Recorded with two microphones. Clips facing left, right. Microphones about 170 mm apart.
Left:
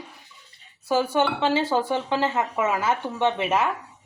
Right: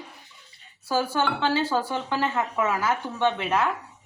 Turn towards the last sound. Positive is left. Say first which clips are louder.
# left 1 dB
turn(degrees=20)  # may be behind; listen again after turning